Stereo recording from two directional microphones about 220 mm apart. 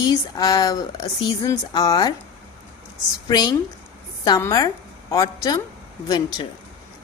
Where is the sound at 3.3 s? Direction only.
20° left (ahead or behind).